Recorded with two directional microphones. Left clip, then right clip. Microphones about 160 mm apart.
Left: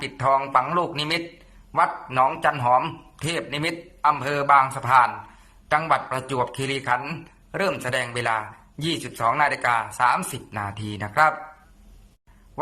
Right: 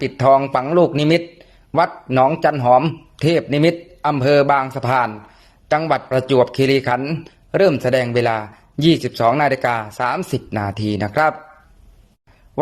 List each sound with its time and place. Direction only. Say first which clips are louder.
0.0 s speech: right 8 dB; 35° right (ahead or behind)